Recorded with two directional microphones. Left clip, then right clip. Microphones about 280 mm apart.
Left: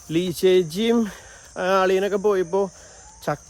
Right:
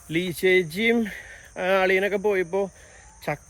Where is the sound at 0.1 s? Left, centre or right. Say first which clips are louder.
Left 2 dB; centre.